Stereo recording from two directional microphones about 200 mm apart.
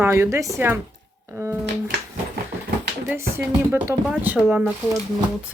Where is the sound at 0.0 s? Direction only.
10° right (ahead or behind).